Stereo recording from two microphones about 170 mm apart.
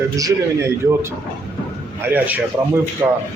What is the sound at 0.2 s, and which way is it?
A man's voice, 20° right (ahead or behind).